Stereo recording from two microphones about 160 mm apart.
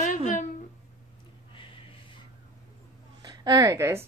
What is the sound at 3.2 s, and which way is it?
Speech, 25° right (ahead or behind).